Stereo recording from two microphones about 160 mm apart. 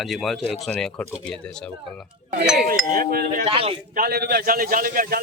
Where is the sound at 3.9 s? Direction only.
75° right (ahead or behind).